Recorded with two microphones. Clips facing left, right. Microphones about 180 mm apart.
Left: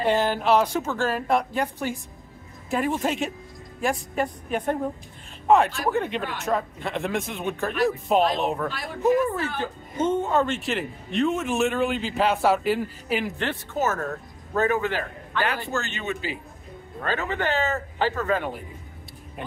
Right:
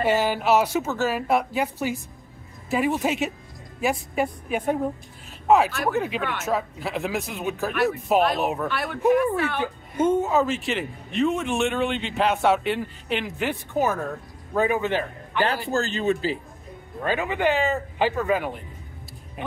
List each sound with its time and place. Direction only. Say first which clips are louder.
0.0 s a man's voice: even; 10° right (ahead or behind)
8.6 s speech: right 3 dB; 65° right (ahead or behind)
9.6 s a man's voice: right 3 dB; 10° right (ahead or behind)
13.4 s a man's voice: right 2 dB; 15° right (ahead or behind)
15.4 s a man's voice: right 4 dB; 35° right (ahead or behind)
17.0 s speech: right 3 dB; 15° right (ahead or behind)